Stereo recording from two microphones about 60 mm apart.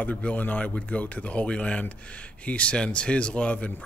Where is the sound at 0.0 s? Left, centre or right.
Left.